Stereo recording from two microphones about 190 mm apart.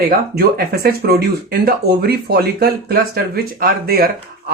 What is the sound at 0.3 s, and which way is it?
Speech, 55° right (ahead or behind).